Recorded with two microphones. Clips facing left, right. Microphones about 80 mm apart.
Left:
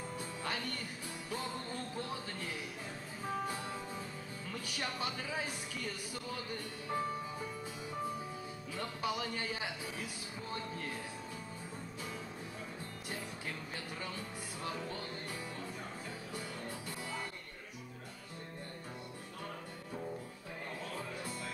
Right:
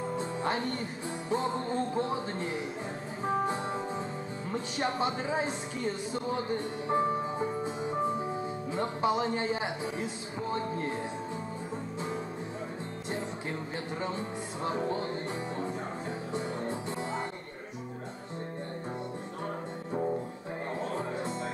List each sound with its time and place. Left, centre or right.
0.0 s music: right
1.3 s speech: right
3.3 s music: right
4.5 s speech: right
14.0 s speech: right
16.3 s music: right
20.8 s music: right